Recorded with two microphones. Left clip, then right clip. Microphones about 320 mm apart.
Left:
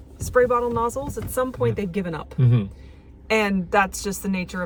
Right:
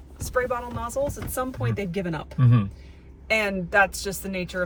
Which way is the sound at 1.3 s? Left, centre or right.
Centre.